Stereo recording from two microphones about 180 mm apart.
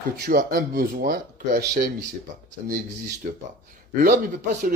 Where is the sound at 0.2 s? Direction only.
55° right (ahead or behind).